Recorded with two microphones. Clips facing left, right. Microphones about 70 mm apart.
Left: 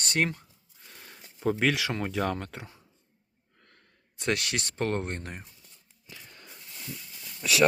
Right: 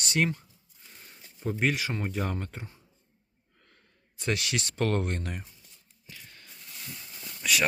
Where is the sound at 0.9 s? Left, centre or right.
Left.